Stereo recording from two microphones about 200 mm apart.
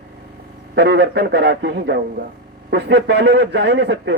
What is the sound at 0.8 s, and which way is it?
A man's voice, 60° right (ahead or behind).